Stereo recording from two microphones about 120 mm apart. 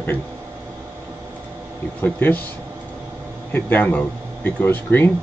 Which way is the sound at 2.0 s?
15° left (ahead or behind).